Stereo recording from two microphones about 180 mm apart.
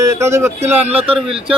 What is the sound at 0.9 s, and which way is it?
Speech, 30° right (ahead or behind).